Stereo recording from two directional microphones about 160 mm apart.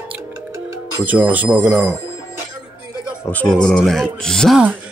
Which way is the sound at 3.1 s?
10° left (ahead or behind).